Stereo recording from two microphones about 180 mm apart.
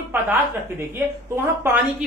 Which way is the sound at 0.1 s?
10° right (ahead or behind).